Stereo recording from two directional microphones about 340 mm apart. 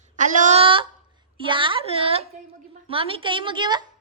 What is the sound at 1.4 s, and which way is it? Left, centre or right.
A woman's voice, centre.